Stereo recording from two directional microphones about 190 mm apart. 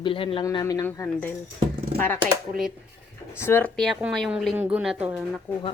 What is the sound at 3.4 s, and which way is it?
Speech, 10° left (ahead or behind).